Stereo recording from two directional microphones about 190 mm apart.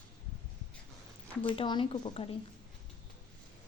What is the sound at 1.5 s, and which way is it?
Speech, 25° left (ahead or behind).